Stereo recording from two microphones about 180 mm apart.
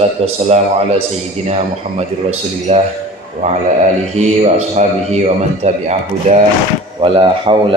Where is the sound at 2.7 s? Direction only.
40° right (ahead or behind).